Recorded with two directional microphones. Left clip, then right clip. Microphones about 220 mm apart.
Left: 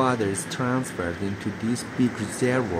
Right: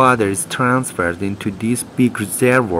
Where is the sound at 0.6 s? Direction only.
25° right (ahead or behind).